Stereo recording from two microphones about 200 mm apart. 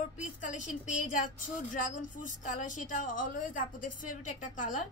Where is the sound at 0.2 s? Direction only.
40° left (ahead or behind).